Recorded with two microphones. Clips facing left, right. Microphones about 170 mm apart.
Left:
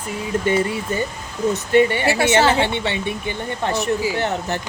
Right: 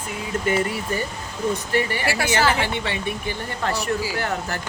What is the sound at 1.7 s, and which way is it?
A woman's voice, 25° left (ahead or behind).